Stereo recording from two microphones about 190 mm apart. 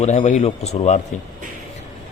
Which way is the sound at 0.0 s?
35° left (ahead or behind).